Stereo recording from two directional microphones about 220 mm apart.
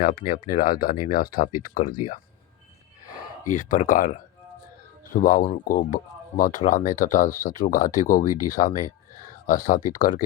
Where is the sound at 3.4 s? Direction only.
35° left (ahead or behind).